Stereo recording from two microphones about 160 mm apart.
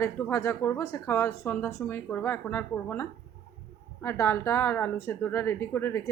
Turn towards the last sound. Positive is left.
turn(degrees=15)  # may be behind; listen again after turning